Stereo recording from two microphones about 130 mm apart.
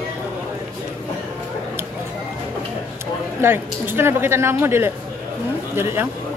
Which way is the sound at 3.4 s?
15° right (ahead or behind).